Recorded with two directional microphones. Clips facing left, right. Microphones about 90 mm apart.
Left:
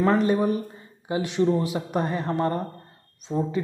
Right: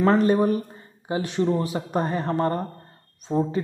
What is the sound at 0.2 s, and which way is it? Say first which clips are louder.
Speech: right 2 dB; 40° right (ahead or behind).